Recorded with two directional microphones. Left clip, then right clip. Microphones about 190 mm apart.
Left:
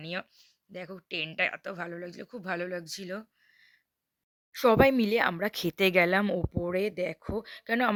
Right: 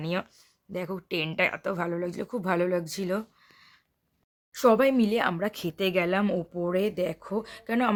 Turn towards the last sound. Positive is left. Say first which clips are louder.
# right 1 dB
turn(degrees=35)  # may be behind; listen again after turning